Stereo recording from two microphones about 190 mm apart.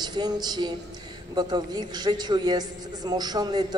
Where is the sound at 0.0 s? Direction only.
20° right (ahead or behind).